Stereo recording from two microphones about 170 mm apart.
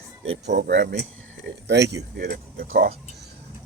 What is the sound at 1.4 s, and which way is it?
Speech, 85° right.